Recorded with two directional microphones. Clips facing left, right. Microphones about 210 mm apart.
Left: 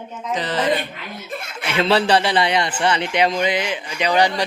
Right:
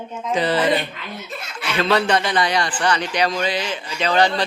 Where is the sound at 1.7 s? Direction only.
30° left (ahead or behind).